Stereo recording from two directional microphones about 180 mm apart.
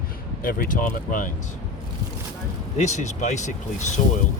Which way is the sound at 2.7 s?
40° left (ahead or behind).